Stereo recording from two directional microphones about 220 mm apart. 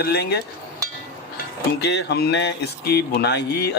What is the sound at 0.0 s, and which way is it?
Speech, 45° left (ahead or behind).